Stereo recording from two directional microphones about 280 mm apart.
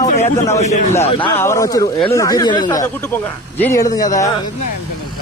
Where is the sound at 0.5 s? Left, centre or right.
Left.